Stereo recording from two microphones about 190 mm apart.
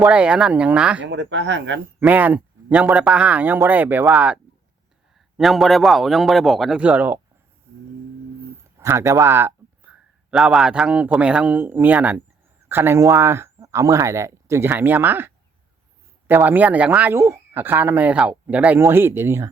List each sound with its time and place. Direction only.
0.0 s a man's voice: 5° right (ahead or behind)
1.0 s speech: 70° right (ahead or behind)
2.0 s a man's voice: 10° right (ahead or behind)
8.8 s speech: 15° right (ahead or behind)